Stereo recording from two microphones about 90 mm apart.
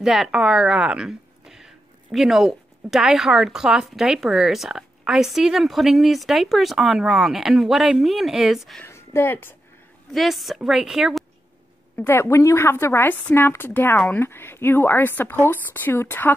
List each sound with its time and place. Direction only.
0.0 s a woman's voice: 5° right (ahead or behind)
8.8 s speech: 25° left (ahead or behind)
10.1 s a woman's voice: centre (ahead or behind)
12.1 s a woman's voice: 30° left (ahead or behind)